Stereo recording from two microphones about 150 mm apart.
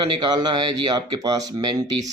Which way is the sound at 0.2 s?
30° right (ahead or behind).